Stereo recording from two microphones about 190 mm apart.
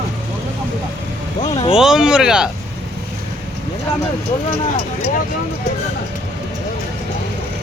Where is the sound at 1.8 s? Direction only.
5° right (ahead or behind).